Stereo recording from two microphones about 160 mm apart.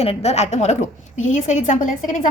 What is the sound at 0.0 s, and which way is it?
A woman's voice, 40° left (ahead or behind).